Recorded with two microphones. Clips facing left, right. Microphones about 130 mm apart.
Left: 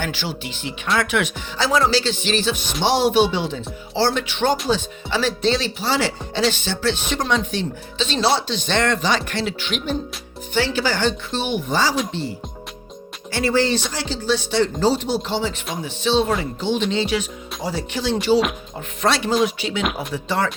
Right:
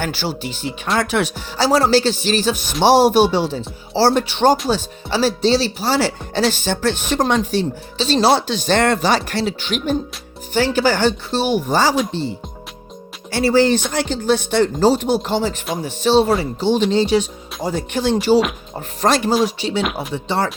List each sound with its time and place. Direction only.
0.0 s speech: 40° right (ahead or behind)
13.3 s speech: 40° right (ahead or behind)
17.6 s speech: 50° right (ahead or behind)
19.5 s speech: 35° right (ahead or behind)
19.8 s speech: centre (ahead or behind)
20.2 s speech: 30° right (ahead or behind)